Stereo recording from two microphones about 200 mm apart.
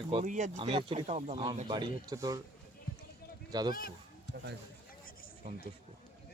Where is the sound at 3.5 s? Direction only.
20° right (ahead or behind).